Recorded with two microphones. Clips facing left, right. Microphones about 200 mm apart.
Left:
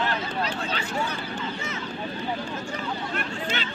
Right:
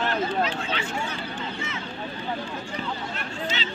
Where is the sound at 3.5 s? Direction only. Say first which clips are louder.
Left 1 dB; 55° left (ahead or behind).